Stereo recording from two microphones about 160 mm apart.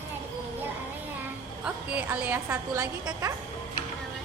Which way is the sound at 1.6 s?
10° right (ahead or behind).